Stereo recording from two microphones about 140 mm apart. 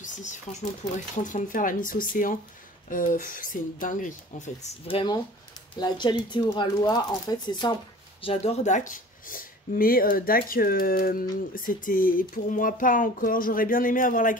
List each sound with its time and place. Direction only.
0.0 s speech: 60° left (ahead or behind)
1.2 s speech: 70° left (ahead or behind)
4.8 s speech: 35° left (ahead or behind)
8.2 s speech: 45° left (ahead or behind); by 14.4 s 70° left (ahead or behind)